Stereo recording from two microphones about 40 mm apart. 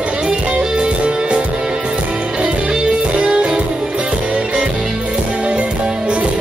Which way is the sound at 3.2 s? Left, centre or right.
Right.